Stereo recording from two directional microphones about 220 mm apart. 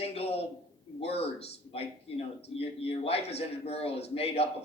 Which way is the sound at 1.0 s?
25° left (ahead or behind).